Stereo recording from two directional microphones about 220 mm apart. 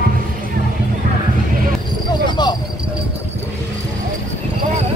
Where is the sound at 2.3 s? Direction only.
20° left (ahead or behind).